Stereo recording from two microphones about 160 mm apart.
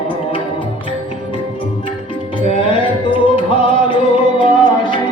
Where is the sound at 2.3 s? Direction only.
35° left (ahead or behind).